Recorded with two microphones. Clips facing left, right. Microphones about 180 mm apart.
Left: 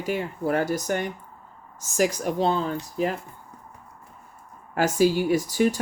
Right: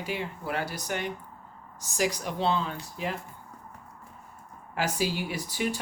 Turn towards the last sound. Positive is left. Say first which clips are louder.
# left 10 dB
turn(degrees=45)  # may be behind; listen again after turning